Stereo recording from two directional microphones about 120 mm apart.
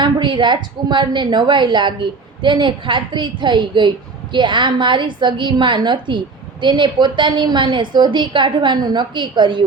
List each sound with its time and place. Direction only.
0.0 s a woman's voice: 40° right (ahead or behind)